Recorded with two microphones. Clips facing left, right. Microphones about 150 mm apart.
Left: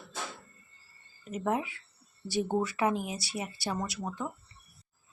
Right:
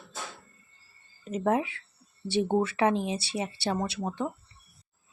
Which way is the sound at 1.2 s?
25° right (ahead or behind).